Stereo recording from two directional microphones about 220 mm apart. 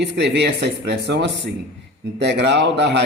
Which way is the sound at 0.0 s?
50° right (ahead or behind).